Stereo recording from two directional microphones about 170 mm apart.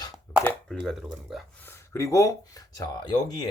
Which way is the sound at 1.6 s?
15° left (ahead or behind).